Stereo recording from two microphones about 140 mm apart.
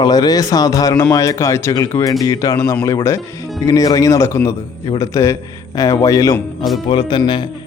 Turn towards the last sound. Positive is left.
turn(degrees=35)  # may be behind; listen again after turning